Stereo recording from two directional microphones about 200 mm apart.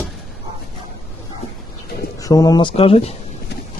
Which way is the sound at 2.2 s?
20° left (ahead or behind).